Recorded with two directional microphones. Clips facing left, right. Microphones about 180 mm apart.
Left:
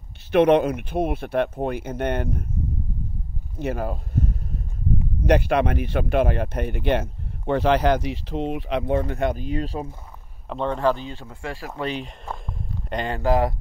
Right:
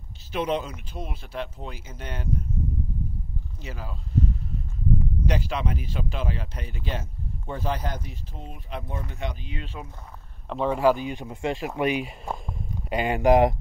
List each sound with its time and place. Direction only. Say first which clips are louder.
0.3 s speech: left 11 dB; 65° left (ahead or behind)
3.5 s speech: left 14 dB; 60° left (ahead or behind); by 9.0 s 75° left (ahead or behind)
9.1 s speech: left 10 dB; 50° left (ahead or behind); by 9.9 s 35° left (ahead or behind)
10.5 s speech: right 1 dB; 5° right (ahead or behind)